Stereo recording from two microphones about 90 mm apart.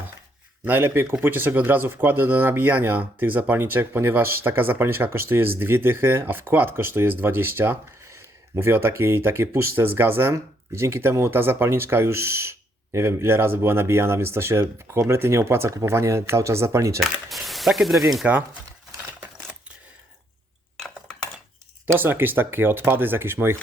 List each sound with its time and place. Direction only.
0.6 s speech: 25° right (ahead or behind)
17.0 s speech: centre (ahead or behind)
18.2 s chopping: 15° right (ahead or behind)
20.7 s cutlery: 10° left (ahead or behind)
21.8 s speech: 25° right (ahead or behind)